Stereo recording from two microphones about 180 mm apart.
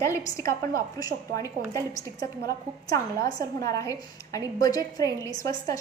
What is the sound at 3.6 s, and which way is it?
A woman's voice, 20° left (ahead or behind).